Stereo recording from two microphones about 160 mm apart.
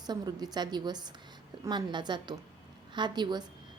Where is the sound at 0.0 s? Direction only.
25° right (ahead or behind).